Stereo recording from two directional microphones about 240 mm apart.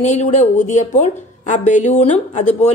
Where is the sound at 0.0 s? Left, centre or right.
Left.